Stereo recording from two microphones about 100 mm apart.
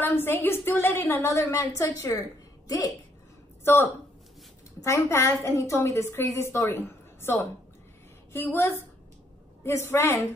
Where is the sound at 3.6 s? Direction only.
25° left (ahead or behind).